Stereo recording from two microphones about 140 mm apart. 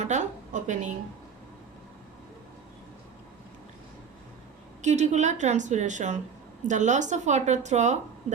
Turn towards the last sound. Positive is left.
turn(degrees=-55)  # may be behind; listen again after turning